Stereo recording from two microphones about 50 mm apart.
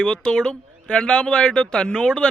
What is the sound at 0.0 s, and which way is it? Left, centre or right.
Speech, centre.